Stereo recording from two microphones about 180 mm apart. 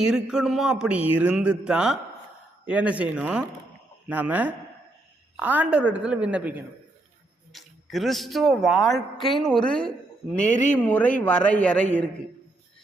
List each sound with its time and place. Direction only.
0.0 s a woman's voice: 5° right (ahead or behind)
10.4 s speech: 40° left (ahead or behind)
10.8 s speech: 10° left (ahead or behind)